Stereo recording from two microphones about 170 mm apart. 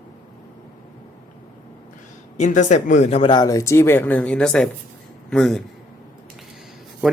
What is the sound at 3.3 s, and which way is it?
A man's voice, 20° left (ahead or behind).